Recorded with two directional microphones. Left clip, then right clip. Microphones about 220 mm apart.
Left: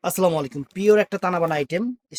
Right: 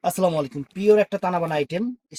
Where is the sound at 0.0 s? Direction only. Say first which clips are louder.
Left 1 dB; 35° left (ahead or behind).